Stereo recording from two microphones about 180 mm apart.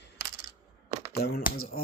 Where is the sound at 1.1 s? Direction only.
60° left (ahead or behind).